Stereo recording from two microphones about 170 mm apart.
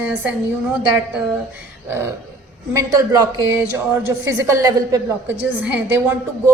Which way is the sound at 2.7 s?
20° right (ahead or behind).